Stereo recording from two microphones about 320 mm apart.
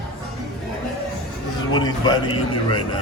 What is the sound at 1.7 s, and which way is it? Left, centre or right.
A man's voice, centre.